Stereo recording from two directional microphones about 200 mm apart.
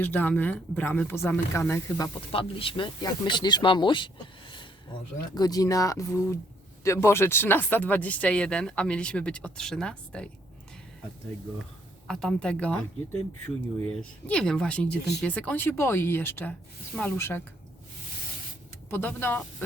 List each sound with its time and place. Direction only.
0.0 s speech: 10° left (ahead or behind)
2.3 s speech: 25° left (ahead or behind); by 10.2 s 5° left (ahead or behind)
12.0 s speech: 5° left (ahead or behind)
13.8 s speech: 5° left (ahead or behind)
18.9 s speech: 10° left (ahead or behind)